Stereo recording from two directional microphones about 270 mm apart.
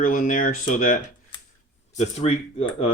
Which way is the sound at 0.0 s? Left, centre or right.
Left.